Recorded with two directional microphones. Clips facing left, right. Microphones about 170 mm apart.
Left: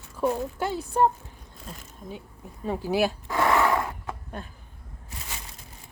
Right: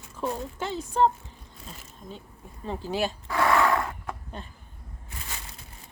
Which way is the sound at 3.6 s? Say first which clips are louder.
Even; 15° left (ahead or behind).